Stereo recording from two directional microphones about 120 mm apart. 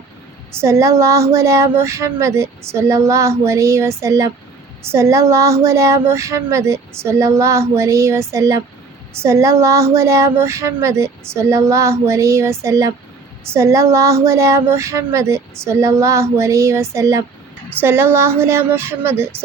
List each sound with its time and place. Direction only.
0.5 s speech: 25° right (ahead or behind)